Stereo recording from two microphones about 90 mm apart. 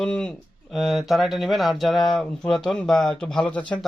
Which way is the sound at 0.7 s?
Centre (ahead or behind).